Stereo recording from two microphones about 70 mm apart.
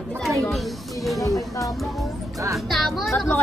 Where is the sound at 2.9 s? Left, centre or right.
Centre.